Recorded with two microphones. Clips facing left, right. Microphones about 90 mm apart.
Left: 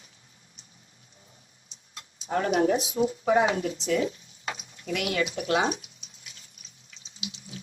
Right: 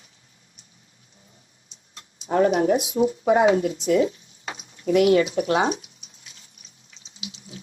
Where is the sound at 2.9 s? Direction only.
35° right (ahead or behind).